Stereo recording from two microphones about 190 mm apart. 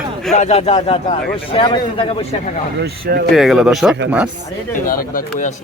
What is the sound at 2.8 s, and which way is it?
Speech, 60° right (ahead or behind).